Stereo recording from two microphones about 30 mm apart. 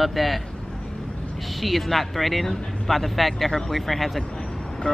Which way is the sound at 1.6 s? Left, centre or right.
Centre.